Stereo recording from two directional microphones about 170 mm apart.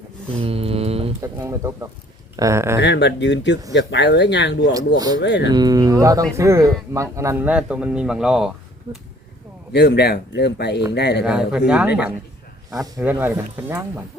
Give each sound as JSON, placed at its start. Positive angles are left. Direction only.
{"t": 0.3, "sound": "mantra", "side_deg": -35}
{"t": 1.2, "sound": "a man's voice", "side_deg": -15}
{"t": 2.8, "sound": "speech", "side_deg": 90}
{"t": 4.9, "sound": "speech", "side_deg": -25}
{"t": 5.2, "sound": "speech", "side_deg": 90}
{"t": 5.5, "sound": "a man's voice", "side_deg": -25}
{"t": 9.7, "sound": "speech", "side_deg": 75}
{"t": 11.2, "sound": "a man's voice", "side_deg": -5}